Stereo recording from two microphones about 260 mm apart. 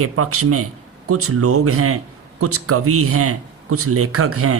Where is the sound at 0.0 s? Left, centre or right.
Right.